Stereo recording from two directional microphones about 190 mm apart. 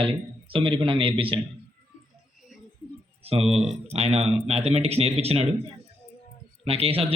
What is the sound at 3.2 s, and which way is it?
Speech, 30° right (ahead or behind).